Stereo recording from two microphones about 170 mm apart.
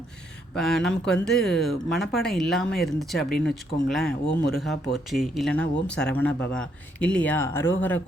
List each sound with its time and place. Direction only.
0.5 s speech: centre (ahead or behind)